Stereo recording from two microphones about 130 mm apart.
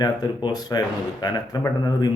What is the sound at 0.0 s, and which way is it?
Speech, 30° left (ahead or behind).